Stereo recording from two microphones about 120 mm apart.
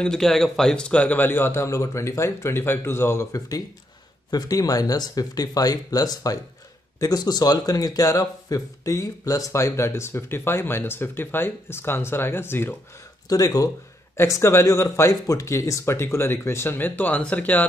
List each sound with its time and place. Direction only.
0.0 s speech: 5° left (ahead or behind)
13.3 s speech: 30° left (ahead or behind); by 17.6 s 15° left (ahead or behind)